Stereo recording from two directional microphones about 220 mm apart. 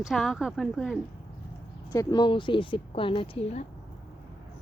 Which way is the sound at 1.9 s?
15° left (ahead or behind).